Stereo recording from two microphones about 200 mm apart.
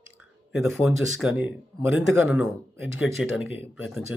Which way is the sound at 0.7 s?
Centre (ahead or behind).